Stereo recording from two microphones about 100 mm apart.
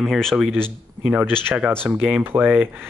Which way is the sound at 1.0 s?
15° right (ahead or behind).